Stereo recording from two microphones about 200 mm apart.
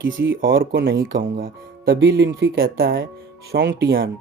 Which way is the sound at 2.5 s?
50° right (ahead or behind).